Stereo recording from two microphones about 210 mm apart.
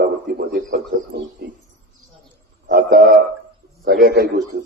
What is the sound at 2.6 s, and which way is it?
A man's voice, 45° right (ahead or behind).